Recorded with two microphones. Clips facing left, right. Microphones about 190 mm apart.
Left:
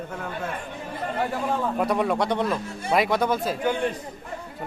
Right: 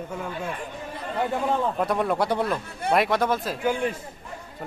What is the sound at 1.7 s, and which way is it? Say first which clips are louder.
A man's voice: left 1 dB; centre (ahead or behind).